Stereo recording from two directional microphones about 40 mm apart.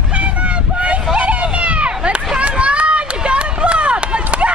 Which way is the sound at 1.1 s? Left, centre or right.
Right.